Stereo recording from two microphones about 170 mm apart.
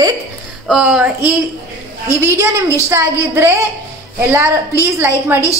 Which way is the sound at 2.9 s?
15° right (ahead or behind).